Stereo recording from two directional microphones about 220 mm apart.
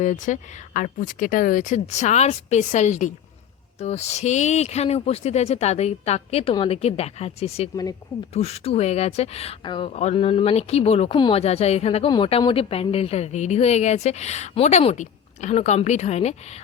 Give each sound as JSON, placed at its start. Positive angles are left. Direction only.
{"t": 0.0, "sound": "speech", "side_deg": 35}